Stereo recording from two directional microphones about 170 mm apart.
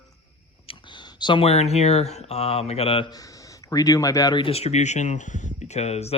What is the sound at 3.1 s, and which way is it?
Speech, 20° left (ahead or behind).